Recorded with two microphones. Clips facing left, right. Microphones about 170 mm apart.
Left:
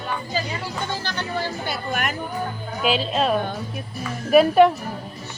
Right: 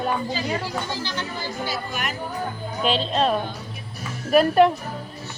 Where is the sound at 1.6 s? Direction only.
55° left (ahead or behind).